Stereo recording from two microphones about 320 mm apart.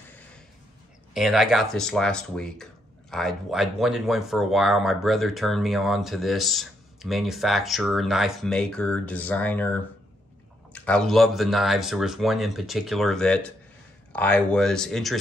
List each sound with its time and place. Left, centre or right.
1.1 s speech: centre